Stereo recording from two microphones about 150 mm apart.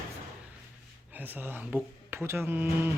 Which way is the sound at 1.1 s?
10° right (ahead or behind).